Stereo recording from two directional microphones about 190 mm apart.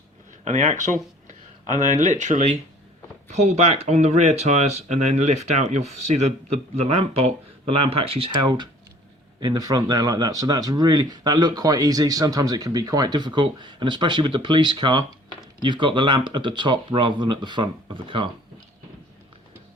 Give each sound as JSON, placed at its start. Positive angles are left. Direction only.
{"t": 0.4, "sound": "speech", "side_deg": -40}